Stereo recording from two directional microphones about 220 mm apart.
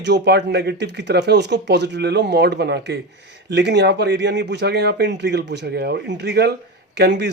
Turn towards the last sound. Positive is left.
turn(degrees=-50)  # may be behind; listen again after turning